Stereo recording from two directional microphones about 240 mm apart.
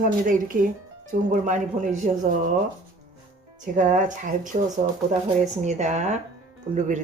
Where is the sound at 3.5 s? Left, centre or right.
Right.